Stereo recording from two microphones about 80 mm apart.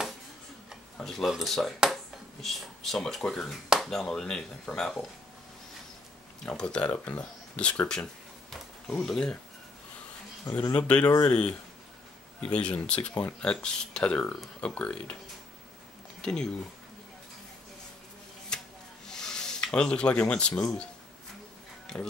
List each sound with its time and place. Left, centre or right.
1.0 s speech: centre
6.4 s speech: centre
10.7 s speech: centre
16.2 s speech: centre
18.5 s chopping: centre
19.0 s speech: centre